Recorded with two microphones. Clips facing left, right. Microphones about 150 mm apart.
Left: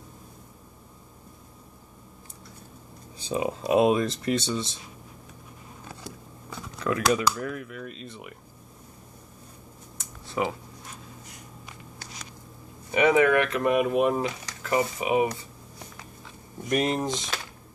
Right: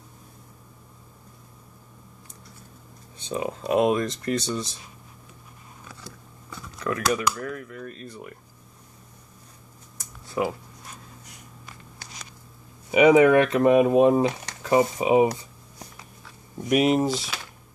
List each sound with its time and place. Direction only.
3.3 s speech: 15° left (ahead or behind)
4.5 s speech: 25° left (ahead or behind)
7.2 s speech: 15° left (ahead or behind)
10.4 s speech: 5° left (ahead or behind)
12.9 s speech: 15° right (ahead or behind)
16.6 s speech: 5° right (ahead or behind)